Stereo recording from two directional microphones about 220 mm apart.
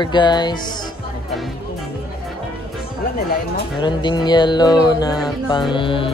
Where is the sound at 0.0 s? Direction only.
20° left (ahead or behind).